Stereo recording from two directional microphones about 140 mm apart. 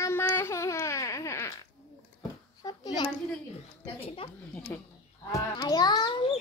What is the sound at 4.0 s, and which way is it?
Speech, 40° left (ahead or behind).